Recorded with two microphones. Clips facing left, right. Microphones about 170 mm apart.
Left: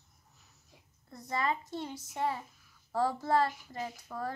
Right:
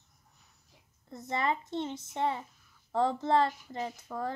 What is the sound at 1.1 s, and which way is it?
A woman's voice, 25° right (ahead or behind).